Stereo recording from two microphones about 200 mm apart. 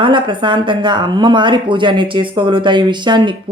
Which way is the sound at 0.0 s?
25° right (ahead or behind).